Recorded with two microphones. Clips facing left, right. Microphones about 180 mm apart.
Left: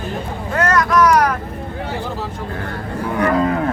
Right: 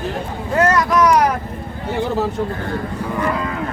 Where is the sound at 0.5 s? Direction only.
25° right (ahead or behind).